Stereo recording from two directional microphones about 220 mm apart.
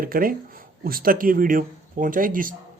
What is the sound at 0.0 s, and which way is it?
Speech, 40° right (ahead or behind).